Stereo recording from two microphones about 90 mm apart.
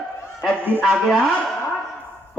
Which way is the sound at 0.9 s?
Centre (ahead or behind).